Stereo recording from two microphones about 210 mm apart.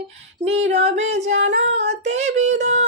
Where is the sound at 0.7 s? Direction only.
30° right (ahead or behind).